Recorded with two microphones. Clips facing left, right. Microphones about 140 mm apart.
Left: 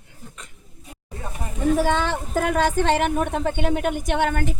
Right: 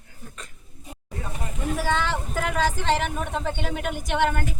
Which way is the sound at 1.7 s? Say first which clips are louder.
Even; 50° left (ahead or behind).